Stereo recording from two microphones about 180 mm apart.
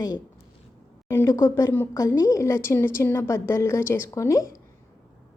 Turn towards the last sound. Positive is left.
turn(degrees=15)  # may be behind; listen again after turning